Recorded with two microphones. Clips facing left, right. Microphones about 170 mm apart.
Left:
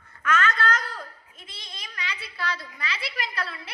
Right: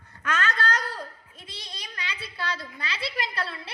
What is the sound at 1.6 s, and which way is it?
A woman's voice, 30° right (ahead or behind).